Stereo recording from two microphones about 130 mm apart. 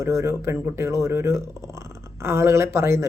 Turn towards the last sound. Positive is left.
turn(degrees=-20)  # may be behind; listen again after turning